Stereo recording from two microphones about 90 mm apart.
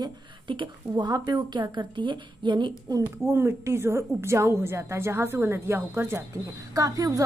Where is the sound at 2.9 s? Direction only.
40° right (ahead or behind).